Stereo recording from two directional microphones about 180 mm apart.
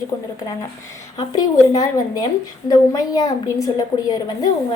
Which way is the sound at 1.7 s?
20° left (ahead or behind).